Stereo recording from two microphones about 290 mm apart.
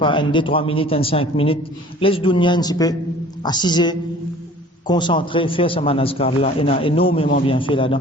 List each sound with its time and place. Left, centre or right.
0.0 s a man's voice: centre